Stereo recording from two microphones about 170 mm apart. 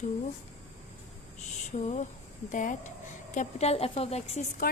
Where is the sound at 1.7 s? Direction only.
40° left (ahead or behind).